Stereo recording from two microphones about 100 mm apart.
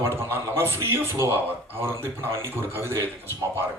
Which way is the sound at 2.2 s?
25° right (ahead or behind).